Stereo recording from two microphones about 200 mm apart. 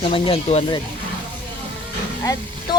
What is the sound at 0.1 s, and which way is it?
Speech, 25° left (ahead or behind).